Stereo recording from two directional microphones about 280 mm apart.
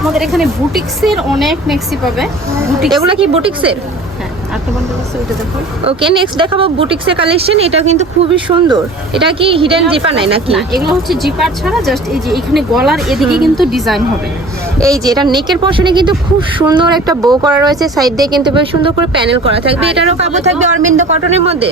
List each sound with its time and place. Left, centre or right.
0.0 s speech: centre
3.0 s speech: centre
5.8 s speech: centre
10.8 s speech: centre
14.8 s speech: centre